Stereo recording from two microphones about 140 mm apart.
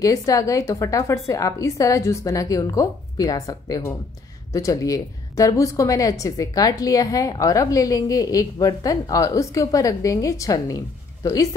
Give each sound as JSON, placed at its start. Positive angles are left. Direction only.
{"t": 0.0, "sound": "a woman's voice", "side_deg": 25}